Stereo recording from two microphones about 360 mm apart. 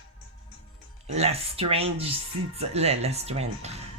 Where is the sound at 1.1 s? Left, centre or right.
Centre.